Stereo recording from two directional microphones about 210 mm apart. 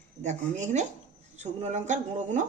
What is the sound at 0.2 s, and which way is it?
Speech, 35° right (ahead or behind).